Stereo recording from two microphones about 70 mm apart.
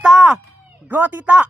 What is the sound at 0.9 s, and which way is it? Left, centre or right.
Speech, right.